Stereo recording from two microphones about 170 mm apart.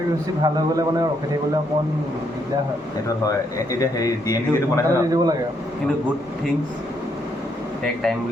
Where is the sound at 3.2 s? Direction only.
20° left (ahead or behind).